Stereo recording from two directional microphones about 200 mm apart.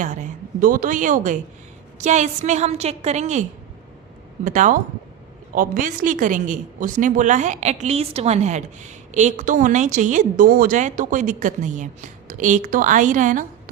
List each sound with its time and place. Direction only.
0.0 s a woman's voice: 40° right (ahead or behind)
4.4 s a woman's voice: 40° right (ahead or behind)